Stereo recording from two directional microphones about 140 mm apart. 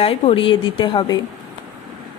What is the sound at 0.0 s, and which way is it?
Speech, 40° left (ahead or behind).